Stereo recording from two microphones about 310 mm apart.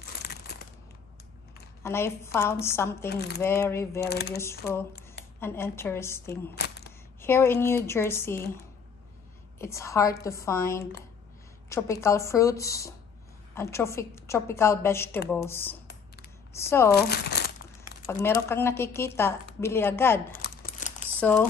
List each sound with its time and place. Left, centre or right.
0.3 s crumpling: left
1.8 s speech: centre
3.1 s speech: left
3.3 s speech: centre
4.1 s speech: left
5.4 s speech: centre
6.5 s single-lens reflex camera: left
7.2 s speech: centre
9.6 s speech: centre
16.9 s speech: left
18.0 s speech: centre
20.4 s crumpling: left
21.2 s speech: centre